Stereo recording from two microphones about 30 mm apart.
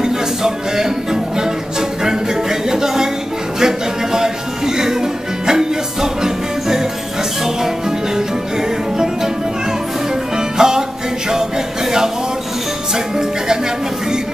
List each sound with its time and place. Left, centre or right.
0.0 s music: centre
2.7 s a sound: centre
3.5 s music: centre
8.9 s music: centre
10.3 s music: centre